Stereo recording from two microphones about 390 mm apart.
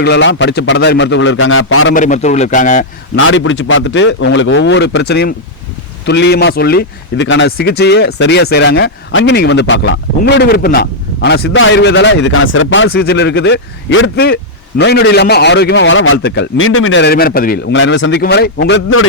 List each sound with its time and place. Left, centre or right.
0.0 s speech: left
2.0 s speech: centre
3.2 s speech: left